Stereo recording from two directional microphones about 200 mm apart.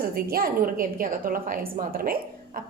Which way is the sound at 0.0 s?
50° right (ahead or behind).